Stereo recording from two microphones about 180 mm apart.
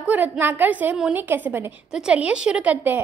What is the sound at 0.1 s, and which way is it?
A woman's voice, 10° right (ahead or behind).